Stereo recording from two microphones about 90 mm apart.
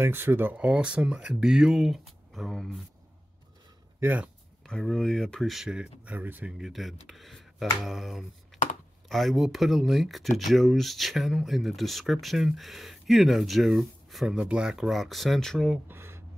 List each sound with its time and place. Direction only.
0.0 s speech: 25° right (ahead or behind); by 2.8 s centre (ahead or behind)
4.0 s speech: 20° right (ahead or behind)
4.6 s speech: 5° left (ahead or behind); by 6.5 s 20° right (ahead or behind)
6.6 s speech: centre (ahead or behind)
15.9 s a sound: 25° right (ahead or behind)